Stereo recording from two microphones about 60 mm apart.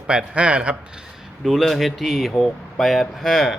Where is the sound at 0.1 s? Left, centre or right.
Centre.